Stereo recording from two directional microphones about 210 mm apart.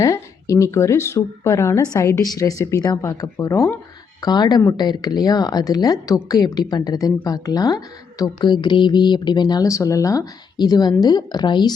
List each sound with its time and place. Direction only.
0.0 s speech: 15° left (ahead or behind)